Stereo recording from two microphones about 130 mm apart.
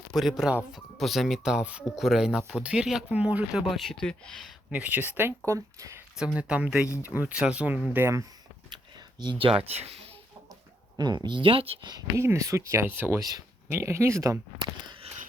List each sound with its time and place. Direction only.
0.1 s speech: centre (ahead or behind)
4.7 s speech: 10° right (ahead or behind)
6.1 s speech: 10° right (ahead or behind)
8.7 s a sound: 35° right (ahead or behind)
9.7 s speech: 50° right (ahead or behind)
10.9 s speech: 35° right (ahead or behind)
11.9 s speech: 25° right (ahead or behind)